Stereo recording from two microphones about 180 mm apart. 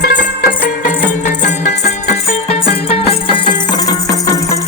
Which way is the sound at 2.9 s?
35° left (ahead or behind).